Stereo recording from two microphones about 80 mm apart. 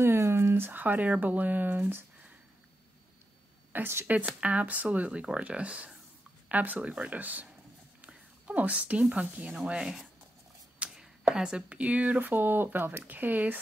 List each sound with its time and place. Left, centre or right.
0.0 s speech: right
3.7 s speech: right
8.0 s a sound: centre
9.1 s speech: centre
10.8 s a sound: centre
11.3 s speech: centre